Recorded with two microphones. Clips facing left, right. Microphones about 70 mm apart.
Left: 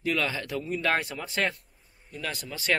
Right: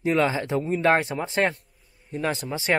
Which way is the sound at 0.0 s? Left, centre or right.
Right.